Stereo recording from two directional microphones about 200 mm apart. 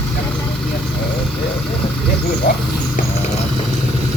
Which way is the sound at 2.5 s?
50° left (ahead or behind).